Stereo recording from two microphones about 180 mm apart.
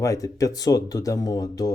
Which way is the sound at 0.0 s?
20° left (ahead or behind).